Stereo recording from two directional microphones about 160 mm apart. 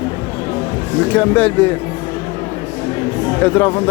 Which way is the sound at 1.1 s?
10° left (ahead or behind).